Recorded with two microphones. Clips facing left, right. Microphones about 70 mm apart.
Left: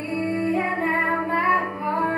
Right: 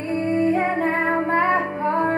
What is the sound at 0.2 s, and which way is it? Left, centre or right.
Music, right.